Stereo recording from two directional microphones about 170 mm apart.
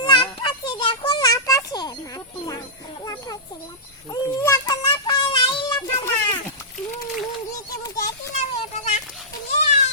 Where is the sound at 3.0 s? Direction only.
20° left (ahead or behind).